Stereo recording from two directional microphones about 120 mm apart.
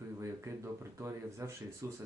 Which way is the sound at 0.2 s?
20° right (ahead or behind).